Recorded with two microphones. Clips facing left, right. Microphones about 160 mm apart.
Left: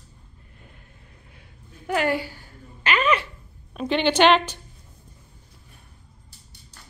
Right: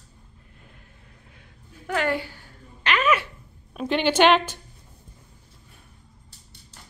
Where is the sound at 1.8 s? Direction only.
10° left (ahead or behind).